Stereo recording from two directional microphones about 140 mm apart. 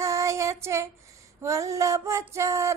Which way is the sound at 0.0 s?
20° right (ahead or behind).